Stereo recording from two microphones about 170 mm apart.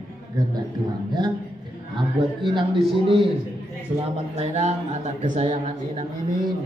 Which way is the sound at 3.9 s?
40° right (ahead or behind).